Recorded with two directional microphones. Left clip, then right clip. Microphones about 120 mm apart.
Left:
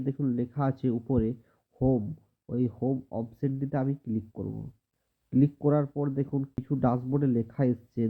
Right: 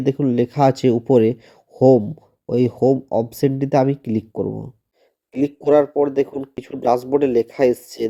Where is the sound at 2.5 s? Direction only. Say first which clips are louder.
Right 14 dB; 15° right (ahead or behind).